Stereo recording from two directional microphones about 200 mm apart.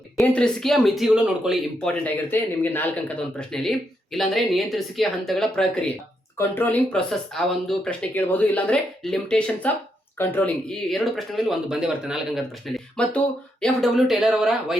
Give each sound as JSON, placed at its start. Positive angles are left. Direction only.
{"t": 0.2, "sound": "speech", "side_deg": 5}
{"t": 2.0, "sound": "speech", "side_deg": 10}